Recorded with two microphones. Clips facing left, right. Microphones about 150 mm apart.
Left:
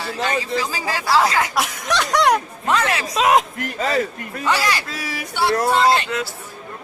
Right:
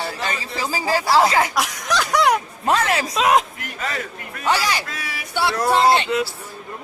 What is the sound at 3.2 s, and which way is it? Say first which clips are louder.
Speech: left 2 dB; centre (ahead or behind).